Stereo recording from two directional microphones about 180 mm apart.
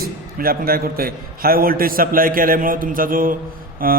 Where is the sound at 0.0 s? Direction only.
55° right (ahead or behind).